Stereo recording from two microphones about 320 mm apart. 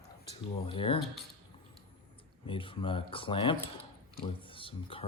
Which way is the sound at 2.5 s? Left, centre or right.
Centre.